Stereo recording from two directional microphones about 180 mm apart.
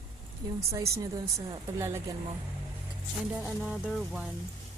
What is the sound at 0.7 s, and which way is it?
A woman's voice, 15° right (ahead or behind).